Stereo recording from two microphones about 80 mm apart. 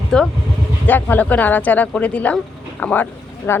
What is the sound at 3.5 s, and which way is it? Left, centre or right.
Speech, left.